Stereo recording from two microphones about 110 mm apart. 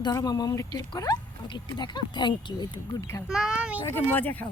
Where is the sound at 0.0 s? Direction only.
35° left (ahead or behind).